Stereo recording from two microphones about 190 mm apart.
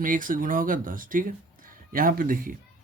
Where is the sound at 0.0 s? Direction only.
45° right (ahead or behind).